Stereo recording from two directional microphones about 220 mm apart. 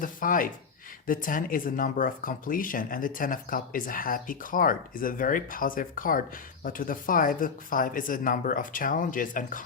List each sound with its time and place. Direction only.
0.0 s speech: 40° left (ahead or behind)